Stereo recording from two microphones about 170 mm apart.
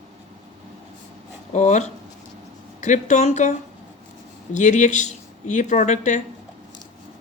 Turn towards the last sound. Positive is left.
turn(degrees=45)  # may be behind; listen again after turning